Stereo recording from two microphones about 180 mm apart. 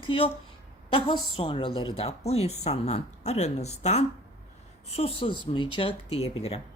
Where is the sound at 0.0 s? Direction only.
30° left (ahead or behind).